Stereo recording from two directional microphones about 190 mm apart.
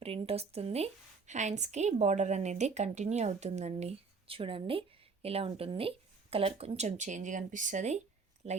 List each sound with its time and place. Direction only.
0.0 s a woman's voice: 30° right (ahead or behind)